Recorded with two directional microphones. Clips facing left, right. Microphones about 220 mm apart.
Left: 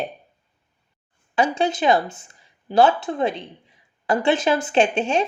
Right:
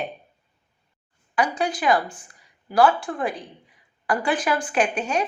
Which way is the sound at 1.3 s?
25° left (ahead or behind).